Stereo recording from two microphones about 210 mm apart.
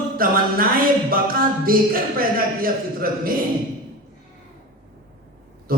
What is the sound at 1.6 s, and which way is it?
Speech, 45° right (ahead or behind).